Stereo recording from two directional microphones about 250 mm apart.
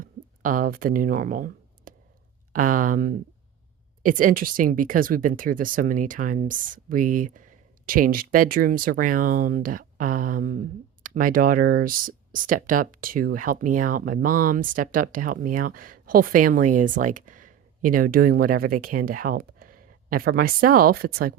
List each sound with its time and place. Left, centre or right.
0.0 s speech: right